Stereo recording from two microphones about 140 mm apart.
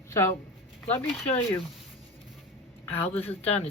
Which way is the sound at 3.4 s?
45° left (ahead or behind).